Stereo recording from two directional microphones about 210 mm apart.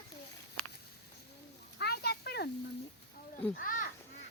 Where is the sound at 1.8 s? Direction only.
50° left (ahead or behind).